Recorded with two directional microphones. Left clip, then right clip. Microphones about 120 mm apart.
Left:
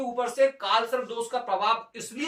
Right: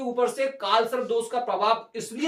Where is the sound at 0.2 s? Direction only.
25° right (ahead or behind).